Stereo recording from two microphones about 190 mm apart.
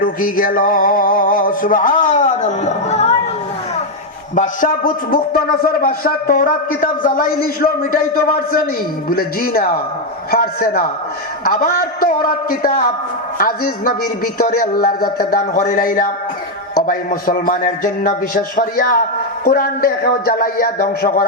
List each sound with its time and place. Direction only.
0.0 s a man's voice: 50° left (ahead or behind)
4.4 s a man's voice: 45° left (ahead or behind)
14.4 s a man's voice: 50° left (ahead or behind)